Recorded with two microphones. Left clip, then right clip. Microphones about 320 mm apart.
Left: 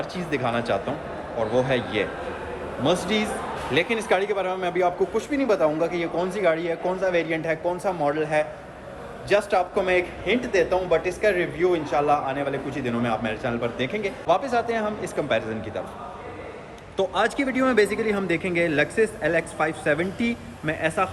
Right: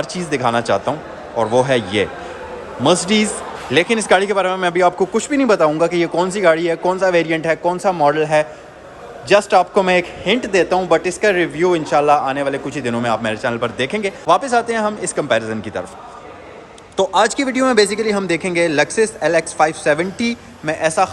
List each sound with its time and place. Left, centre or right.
0.0 s a man's voice: right
17.0 s a man's voice: right